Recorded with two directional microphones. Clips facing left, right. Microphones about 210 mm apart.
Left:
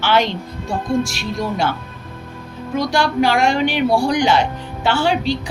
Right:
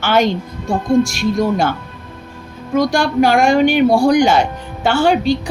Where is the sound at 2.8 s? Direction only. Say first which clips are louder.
Right 4 dB; 45° right (ahead or behind).